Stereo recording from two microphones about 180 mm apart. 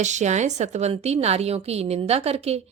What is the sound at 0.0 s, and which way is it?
A woman's voice, 40° right (ahead or behind).